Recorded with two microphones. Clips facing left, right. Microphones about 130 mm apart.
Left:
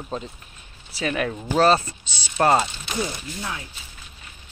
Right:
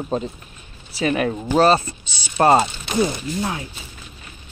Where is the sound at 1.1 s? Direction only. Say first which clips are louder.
Right 5 dB; 15° right (ahead or behind).